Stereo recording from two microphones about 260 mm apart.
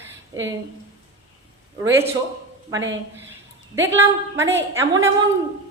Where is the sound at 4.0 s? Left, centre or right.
Centre.